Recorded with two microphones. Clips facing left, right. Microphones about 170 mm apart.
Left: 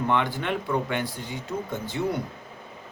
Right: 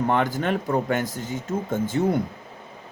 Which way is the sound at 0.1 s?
45° right (ahead or behind).